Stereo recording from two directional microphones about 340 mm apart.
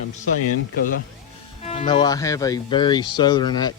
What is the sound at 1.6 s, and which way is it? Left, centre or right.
Speech, centre.